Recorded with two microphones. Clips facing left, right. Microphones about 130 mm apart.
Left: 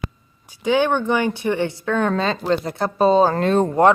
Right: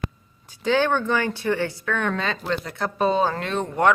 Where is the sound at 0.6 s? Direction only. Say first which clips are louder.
Left 3 dB; 15° left (ahead or behind).